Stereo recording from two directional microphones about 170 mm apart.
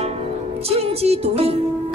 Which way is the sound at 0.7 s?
35° right (ahead or behind).